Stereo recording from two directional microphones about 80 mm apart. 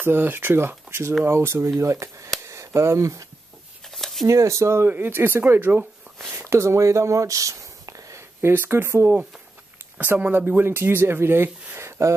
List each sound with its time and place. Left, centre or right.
0.0 s speech: right
2.4 s a sound: right
3.9 s a sound: centre
4.3 s speech: right
6.1 s speech: right
8.4 s speech: right
9.9 s speech: centre
10.3 s speech: right